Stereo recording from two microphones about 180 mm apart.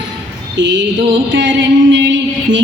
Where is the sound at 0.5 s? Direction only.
85° right.